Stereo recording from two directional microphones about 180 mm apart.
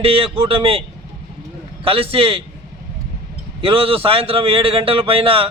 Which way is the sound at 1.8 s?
30° right (ahead or behind).